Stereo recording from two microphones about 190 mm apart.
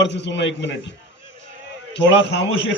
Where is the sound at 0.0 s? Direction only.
70° left (ahead or behind).